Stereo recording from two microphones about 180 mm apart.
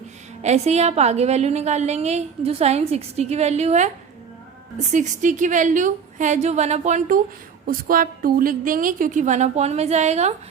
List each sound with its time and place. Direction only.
0.4 s a woman's voice: 35° right (ahead or behind)
7.7 s a woman's voice: 50° right (ahead or behind)